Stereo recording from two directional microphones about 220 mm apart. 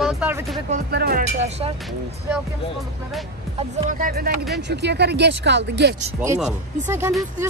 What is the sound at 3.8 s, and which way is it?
Speech, 35° right (ahead or behind).